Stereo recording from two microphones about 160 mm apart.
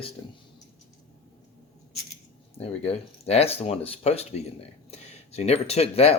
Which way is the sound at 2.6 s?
40° left (ahead or behind).